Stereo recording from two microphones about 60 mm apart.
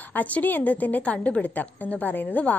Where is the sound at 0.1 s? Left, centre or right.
Left.